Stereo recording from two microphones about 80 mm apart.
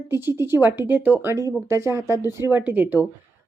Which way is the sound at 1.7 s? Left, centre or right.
Right.